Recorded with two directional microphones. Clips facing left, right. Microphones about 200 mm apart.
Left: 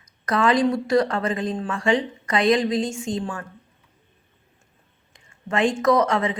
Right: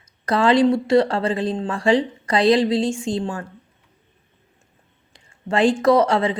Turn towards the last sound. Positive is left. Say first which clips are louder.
# right 3 dB
turn(degrees=-30)  # may be behind; listen again after turning